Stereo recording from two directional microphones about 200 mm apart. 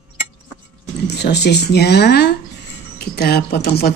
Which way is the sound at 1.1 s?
55° left (ahead or behind).